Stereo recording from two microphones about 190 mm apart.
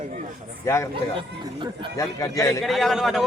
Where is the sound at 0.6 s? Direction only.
15° left (ahead or behind).